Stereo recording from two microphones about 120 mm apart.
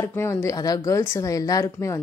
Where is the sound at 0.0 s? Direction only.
20° left (ahead or behind).